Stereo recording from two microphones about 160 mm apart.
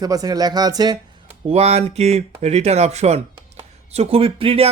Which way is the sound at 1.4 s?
40° right (ahead or behind).